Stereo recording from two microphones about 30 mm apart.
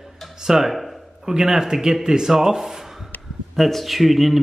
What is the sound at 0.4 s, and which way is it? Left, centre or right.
Speech, centre.